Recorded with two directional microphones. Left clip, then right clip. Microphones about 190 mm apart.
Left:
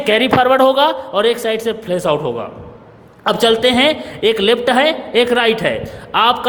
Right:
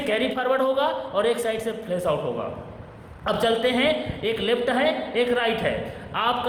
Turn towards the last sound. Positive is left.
turn(degrees=50)  # may be behind; listen again after turning